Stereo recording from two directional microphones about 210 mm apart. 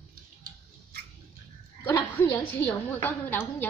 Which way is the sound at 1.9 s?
15° left (ahead or behind).